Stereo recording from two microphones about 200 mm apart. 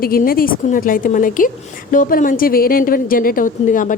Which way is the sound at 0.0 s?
45° left (ahead or behind).